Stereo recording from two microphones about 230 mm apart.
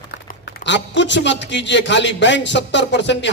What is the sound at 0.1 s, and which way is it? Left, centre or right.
A man's voice, left.